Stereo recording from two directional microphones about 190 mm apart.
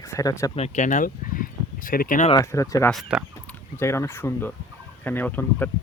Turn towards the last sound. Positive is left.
turn(degrees=10)  # may be behind; listen again after turning